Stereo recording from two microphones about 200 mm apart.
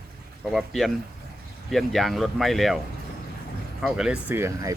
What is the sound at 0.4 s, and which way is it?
Speech, centre (ahead or behind).